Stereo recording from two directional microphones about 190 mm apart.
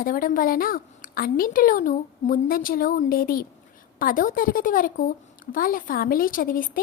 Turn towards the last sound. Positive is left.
turn(degrees=45)  # may be behind; listen again after turning